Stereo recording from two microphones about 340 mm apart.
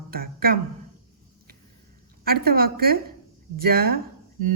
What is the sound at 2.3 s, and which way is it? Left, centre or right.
Mantra, right.